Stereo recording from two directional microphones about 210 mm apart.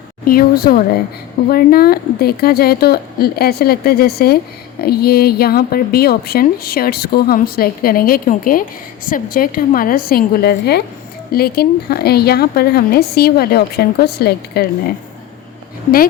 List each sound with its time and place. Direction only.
0.3 s a woman's voice: 45° left (ahead or behind)